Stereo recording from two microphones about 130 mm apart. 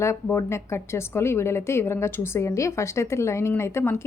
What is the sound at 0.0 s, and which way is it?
A woman's voice, 20° left (ahead or behind).